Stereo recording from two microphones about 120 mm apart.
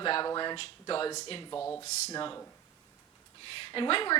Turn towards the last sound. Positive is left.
turn(degrees=40)  # may be behind; listen again after turning